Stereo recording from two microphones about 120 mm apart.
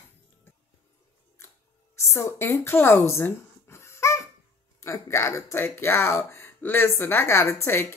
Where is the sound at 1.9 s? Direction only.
25° left (ahead or behind).